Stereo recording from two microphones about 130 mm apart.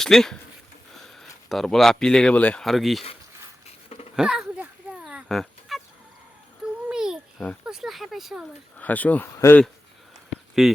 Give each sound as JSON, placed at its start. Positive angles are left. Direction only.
{"t": 0.0, "sound": "speech", "side_deg": 5}
{"t": 3.8, "sound": "a sound", "side_deg": 55}
{"t": 4.1, "sound": "fowl", "side_deg": -5}
{"t": 6.8, "sound": "babbling", "side_deg": -5}
{"t": 7.6, "sound": "speech", "side_deg": -5}
{"t": 8.8, "sound": "speech", "side_deg": 10}
{"t": 10.6, "sound": "speech", "side_deg": -5}